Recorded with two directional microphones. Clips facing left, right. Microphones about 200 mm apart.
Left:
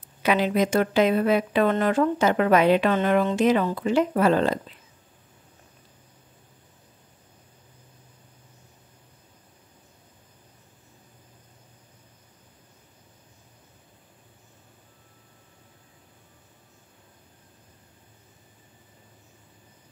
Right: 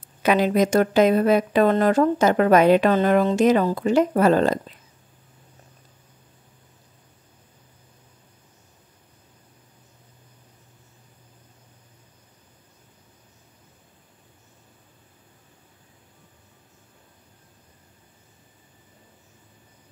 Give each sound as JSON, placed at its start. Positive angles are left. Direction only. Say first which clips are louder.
{"t": 0.2, "sound": "speech", "louder": "right 3 dB", "side_deg": -45}